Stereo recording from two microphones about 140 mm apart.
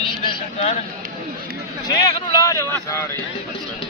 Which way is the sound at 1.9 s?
30° left (ahead or behind).